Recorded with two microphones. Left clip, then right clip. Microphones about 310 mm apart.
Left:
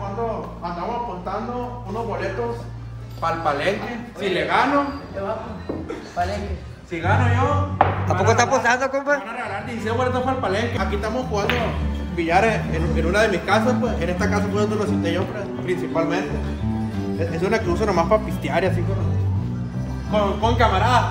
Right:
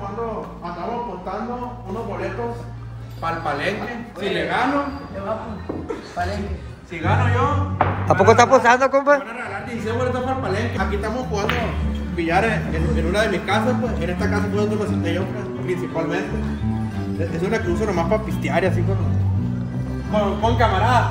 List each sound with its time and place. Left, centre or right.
3.3 s a man's voice: centre
7.0 s speech: left
8.1 s a man's voice: centre
9.8 s speech: centre
10.5 s a man's voice: centre
17.7 s a man's voice: centre
20.1 s a man's voice: centre